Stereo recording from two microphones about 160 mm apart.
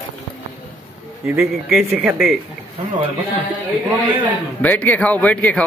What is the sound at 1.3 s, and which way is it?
Speech, 10° right (ahead or behind).